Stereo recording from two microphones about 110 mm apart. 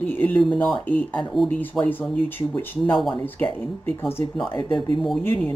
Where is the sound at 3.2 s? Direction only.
15° left (ahead or behind).